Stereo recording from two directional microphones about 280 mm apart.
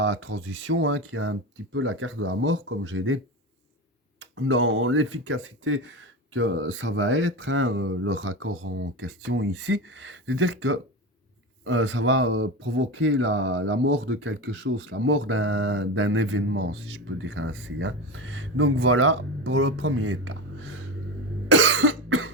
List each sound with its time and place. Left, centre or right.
0.0 s speech: right
4.2 s speech: right
21.5 s cough: right